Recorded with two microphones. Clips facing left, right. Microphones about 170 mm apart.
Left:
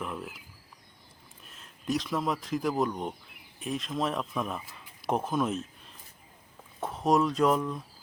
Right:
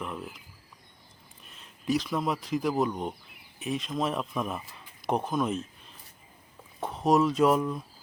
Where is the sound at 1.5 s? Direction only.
Centre (ahead or behind).